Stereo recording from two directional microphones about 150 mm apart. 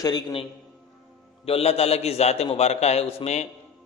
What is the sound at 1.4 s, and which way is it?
A man's voice, 40° left (ahead or behind).